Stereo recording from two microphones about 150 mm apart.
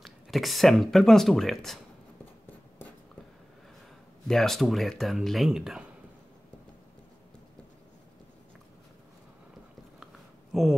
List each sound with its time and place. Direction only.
0.0 s speech: centre (ahead or behind)
4.3 s speech: centre (ahead or behind)
10.5 s a sound: centre (ahead or behind)